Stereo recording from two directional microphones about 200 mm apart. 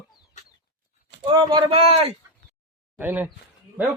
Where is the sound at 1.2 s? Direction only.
25° right (ahead or behind).